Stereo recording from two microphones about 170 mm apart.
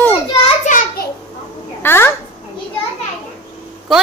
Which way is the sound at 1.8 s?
15° left (ahead or behind).